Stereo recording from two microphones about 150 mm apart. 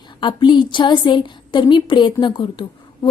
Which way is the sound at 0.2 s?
30° left (ahead or behind).